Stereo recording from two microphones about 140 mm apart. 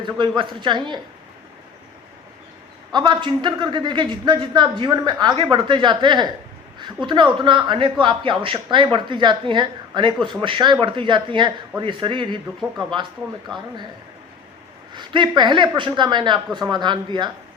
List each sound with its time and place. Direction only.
0.0 s speech: 35° right (ahead or behind)
2.9 s speech: 35° right (ahead or behind)
14.9 s speech: 35° right (ahead or behind)